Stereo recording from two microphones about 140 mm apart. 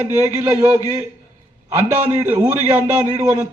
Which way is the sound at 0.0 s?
15° right (ahead or behind).